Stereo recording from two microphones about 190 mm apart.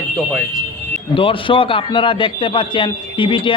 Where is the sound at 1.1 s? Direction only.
25° left (ahead or behind).